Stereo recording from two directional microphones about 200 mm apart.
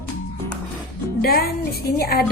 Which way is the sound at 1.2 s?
50° left (ahead or behind).